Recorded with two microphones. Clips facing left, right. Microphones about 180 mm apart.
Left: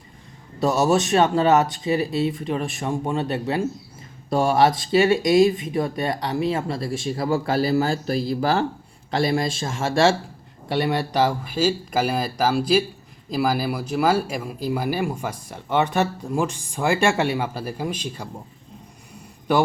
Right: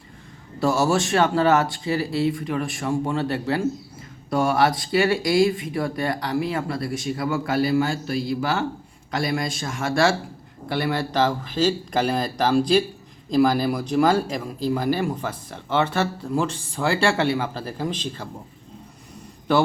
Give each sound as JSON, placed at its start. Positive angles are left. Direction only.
{"t": 0.6, "sound": "speech", "side_deg": 20}
{"t": 19.5, "sound": "speech", "side_deg": 15}